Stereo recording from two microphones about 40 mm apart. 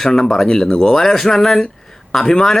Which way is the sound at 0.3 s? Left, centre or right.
Centre.